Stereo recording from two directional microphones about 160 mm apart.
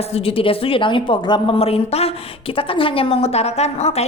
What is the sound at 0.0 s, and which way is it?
A woman's voice, 40° left (ahead or behind).